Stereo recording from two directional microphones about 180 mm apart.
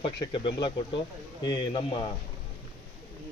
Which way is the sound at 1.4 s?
25° left (ahead or behind).